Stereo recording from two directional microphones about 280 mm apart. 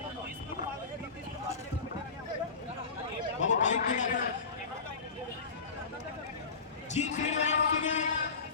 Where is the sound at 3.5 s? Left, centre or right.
Left.